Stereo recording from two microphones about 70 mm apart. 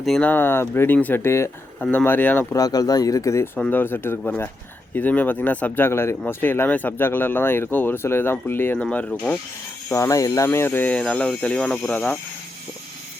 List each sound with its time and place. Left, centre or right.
0.2 s speech: left
2.0 s speech: left
2.6 s speech: left
3.6 s speech: left
8.8 s speech: centre
9.9 s speech: left
10.4 s speech: left; by 11.9 s centre